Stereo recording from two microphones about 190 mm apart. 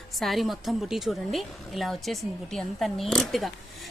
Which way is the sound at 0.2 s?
Centre (ahead or behind).